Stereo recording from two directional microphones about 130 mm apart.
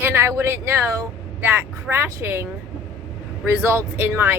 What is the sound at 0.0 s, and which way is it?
A woman's voice, 20° right (ahead or behind).